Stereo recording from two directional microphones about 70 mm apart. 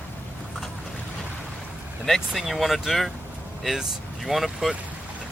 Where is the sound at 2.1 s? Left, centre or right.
Centre.